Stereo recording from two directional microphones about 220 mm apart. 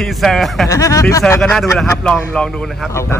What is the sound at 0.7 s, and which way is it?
Speech, 15° left (ahead or behind).